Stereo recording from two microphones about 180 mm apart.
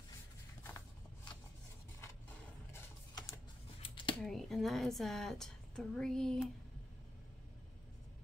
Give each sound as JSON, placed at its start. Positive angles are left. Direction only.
{"t": 2.7, "sound": "typing", "side_deg": 15}
{"t": 4.1, "sound": "speech", "side_deg": 0}